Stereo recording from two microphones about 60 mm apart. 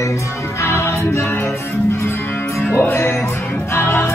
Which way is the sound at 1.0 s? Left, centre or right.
Left.